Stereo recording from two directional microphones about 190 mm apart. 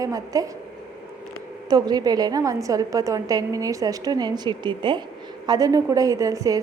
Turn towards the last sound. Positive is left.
turn(degrees=-15)  # may be behind; listen again after turning